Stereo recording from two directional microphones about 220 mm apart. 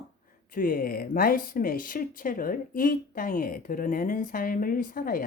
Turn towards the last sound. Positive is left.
turn(degrees=40)  # may be behind; listen again after turning